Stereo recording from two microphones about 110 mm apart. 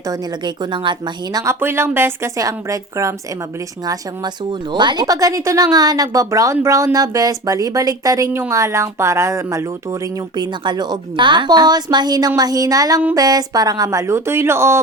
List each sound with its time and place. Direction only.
0.1 s speech: 40° right (ahead or behind)
1.6 s a woman's voice: 20° right (ahead or behind)
4.7 s speech: 45° right (ahead or behind); by 10.0 s 25° right (ahead or behind)
10.3 s speech: 40° right (ahead or behind); by 14.8 s 25° right (ahead or behind)